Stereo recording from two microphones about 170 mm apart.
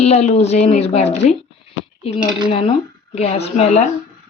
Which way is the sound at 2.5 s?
35° left (ahead or behind).